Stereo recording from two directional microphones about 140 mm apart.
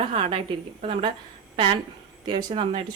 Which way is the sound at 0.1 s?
40° right (ahead or behind).